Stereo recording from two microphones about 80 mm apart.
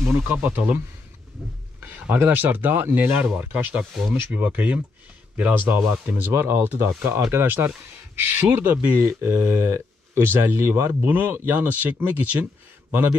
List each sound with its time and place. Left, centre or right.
0.3 s speech: right
1.4 s speech: centre
1.8 s speech: right
5.7 s speech: right